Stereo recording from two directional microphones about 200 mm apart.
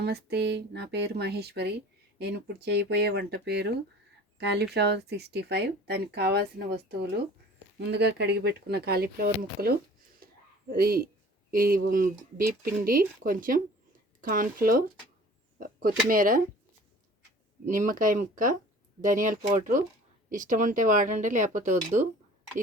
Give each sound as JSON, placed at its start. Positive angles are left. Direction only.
{"t": 0.0, "sound": "speech", "side_deg": -55}
{"t": 15.5, "sound": "a sound", "side_deg": -45}
{"t": 16.0, "sound": "speech", "side_deg": -45}
{"t": 17.7, "sound": "speech", "side_deg": -40}